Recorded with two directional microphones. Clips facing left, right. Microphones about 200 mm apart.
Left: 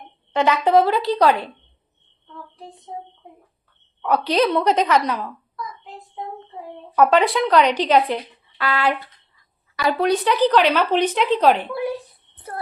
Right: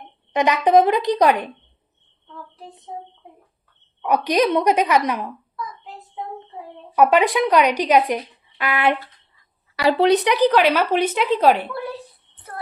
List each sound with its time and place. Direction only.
0.3 s speech: 15° right (ahead or behind)
4.0 s speech: 15° right (ahead or behind)
6.9 s speech: 10° right (ahead or behind)
10.0 s speech: 20° right (ahead or behind)
11.7 s speech: 15° left (ahead or behind)